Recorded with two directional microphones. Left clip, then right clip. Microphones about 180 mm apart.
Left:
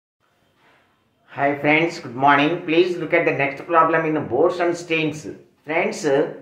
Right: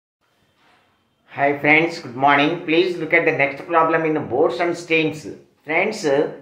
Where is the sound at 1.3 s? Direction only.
10° right (ahead or behind).